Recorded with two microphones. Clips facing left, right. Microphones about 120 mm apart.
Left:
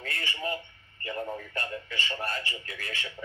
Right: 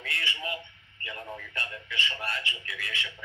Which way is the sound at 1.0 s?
35° left (ahead or behind).